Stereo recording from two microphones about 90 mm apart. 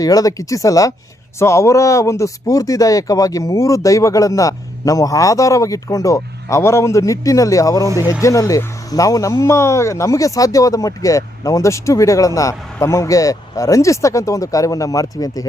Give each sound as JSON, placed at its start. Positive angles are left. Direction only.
{"t": 0.0, "sound": "speech", "side_deg": 40}